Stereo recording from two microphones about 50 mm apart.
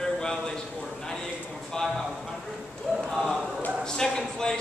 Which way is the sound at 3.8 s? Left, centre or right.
Centre.